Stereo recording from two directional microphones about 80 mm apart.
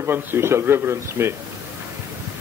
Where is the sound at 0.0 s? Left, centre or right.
Right.